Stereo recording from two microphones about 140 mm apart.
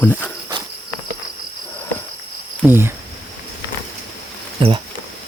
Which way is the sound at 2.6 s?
15° right (ahead or behind).